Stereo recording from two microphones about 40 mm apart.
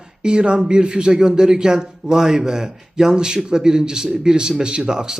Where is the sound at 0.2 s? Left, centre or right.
Right.